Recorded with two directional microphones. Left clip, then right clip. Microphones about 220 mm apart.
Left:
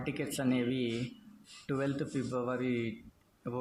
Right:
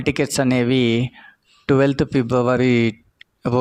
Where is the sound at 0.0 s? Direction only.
45° right (ahead or behind).